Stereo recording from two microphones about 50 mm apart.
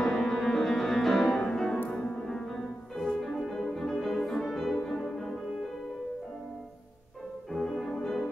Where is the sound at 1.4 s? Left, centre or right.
Centre.